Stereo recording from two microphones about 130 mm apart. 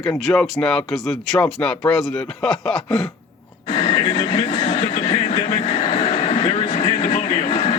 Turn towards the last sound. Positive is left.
turn(degrees=40)  # may be behind; listen again after turning